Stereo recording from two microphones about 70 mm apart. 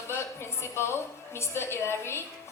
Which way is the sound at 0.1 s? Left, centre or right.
Left.